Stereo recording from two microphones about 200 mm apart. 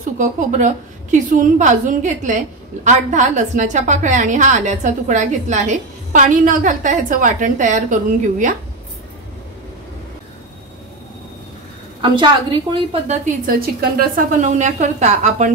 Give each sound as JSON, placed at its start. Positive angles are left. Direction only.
{"t": 0.2, "sound": "a woman's voice", "side_deg": -40}
{"t": 12.0, "sound": "a woman's voice", "side_deg": -25}
{"t": 13.5, "sound": "a woman's voice", "side_deg": -45}